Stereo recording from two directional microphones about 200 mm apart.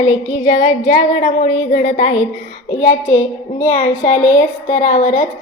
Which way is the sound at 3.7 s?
35° left (ahead or behind).